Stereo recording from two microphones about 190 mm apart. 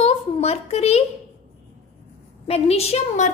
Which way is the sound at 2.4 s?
30° left (ahead or behind).